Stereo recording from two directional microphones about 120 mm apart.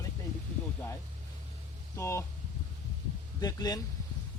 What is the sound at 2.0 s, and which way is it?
Speech, 25° left (ahead or behind).